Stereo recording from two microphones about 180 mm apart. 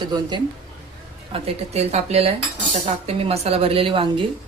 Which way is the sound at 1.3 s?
35° right (ahead or behind).